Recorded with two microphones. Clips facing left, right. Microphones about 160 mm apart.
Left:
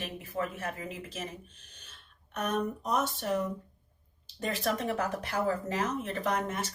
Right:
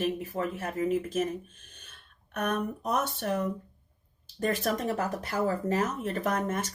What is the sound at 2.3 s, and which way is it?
Speech, 60° right (ahead or behind).